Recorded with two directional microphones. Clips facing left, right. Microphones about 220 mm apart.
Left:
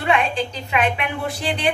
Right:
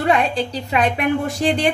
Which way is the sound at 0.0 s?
35° right (ahead or behind).